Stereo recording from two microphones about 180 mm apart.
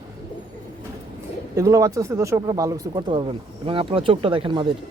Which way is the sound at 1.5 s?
15° right (ahead or behind).